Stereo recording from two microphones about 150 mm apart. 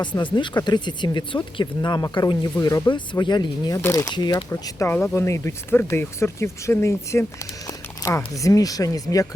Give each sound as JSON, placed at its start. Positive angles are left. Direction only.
{"t": 0.0, "sound": "speech", "side_deg": 30}
{"t": 3.8, "sound": "speech", "side_deg": 20}
{"t": 4.9, "sound": "speech", "side_deg": 10}